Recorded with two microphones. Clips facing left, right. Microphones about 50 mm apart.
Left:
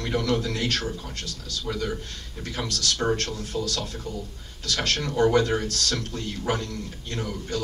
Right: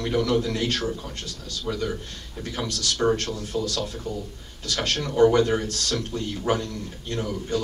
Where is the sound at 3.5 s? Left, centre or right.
Right.